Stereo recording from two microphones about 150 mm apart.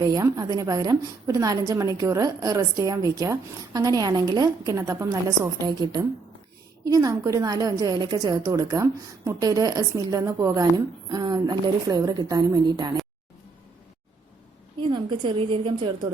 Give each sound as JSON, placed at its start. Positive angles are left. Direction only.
{"t": 0.0, "sound": "a woman's voice", "side_deg": -25}
{"t": 14.8, "sound": "a woman's voice", "side_deg": -35}